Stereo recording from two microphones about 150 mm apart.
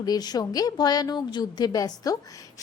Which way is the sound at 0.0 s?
25° left (ahead or behind).